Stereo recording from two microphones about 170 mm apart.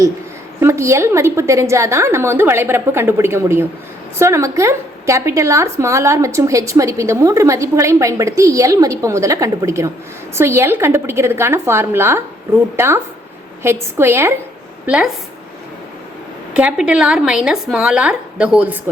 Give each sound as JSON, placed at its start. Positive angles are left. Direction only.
{"t": 0.6, "sound": "a woman's voice", "side_deg": -15}
{"t": 16.6, "sound": "speech", "side_deg": -5}